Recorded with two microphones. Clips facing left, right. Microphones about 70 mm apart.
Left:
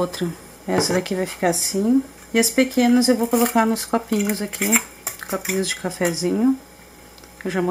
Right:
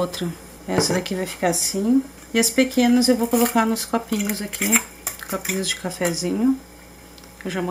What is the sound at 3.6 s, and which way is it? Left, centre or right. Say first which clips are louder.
Speech: left 2 dB; centre.